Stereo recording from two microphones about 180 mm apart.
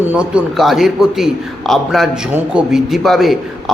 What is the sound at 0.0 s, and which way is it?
A man's voice, 10° right (ahead or behind).